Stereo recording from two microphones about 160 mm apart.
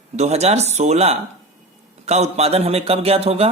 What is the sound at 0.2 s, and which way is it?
Speech, 45° right (ahead or behind).